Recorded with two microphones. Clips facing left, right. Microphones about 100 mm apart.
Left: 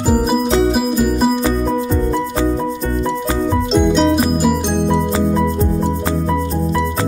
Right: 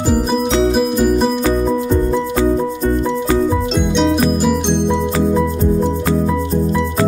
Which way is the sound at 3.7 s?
Centre (ahead or behind).